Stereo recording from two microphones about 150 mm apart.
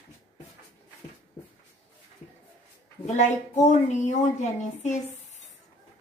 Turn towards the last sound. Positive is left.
turn(degrees=50)  # may be behind; listen again after turning